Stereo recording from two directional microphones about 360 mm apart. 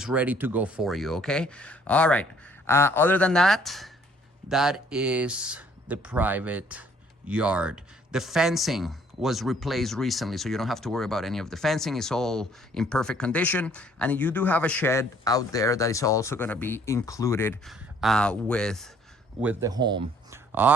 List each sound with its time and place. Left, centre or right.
0.0 s speech: centre